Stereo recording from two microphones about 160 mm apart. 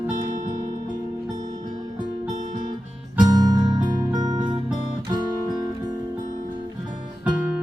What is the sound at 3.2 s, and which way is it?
Music, 25° right (ahead or behind).